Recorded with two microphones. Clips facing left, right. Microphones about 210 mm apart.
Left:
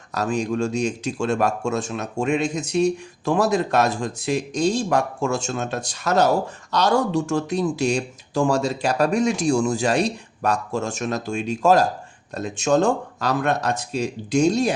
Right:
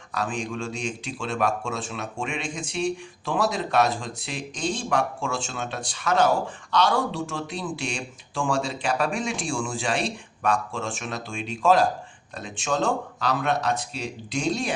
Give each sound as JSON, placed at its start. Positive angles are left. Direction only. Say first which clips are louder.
{"t": 0.1, "sound": "speech", "louder": "left 6 dB", "side_deg": 40}